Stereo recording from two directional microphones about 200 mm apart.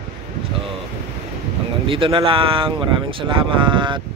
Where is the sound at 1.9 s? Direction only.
25° right (ahead or behind).